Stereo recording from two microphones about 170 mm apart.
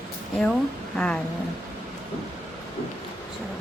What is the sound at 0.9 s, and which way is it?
Speech, 5° left (ahead or behind).